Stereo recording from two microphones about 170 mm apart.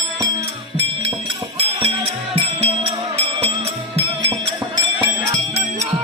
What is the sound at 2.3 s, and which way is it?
Music, 35° right (ahead or behind).